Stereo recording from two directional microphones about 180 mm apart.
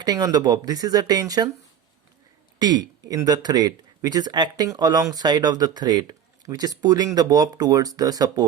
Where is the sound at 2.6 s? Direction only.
25° right (ahead or behind).